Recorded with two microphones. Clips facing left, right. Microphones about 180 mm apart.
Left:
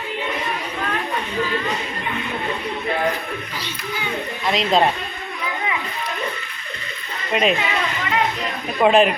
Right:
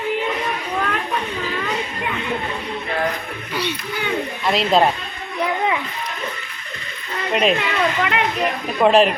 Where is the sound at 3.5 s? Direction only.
65° right (ahead or behind).